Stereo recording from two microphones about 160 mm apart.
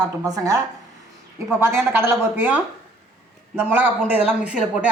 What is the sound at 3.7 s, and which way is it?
Speech, 10° right (ahead or behind).